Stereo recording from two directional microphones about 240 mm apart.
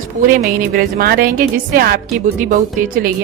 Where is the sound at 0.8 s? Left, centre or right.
Right.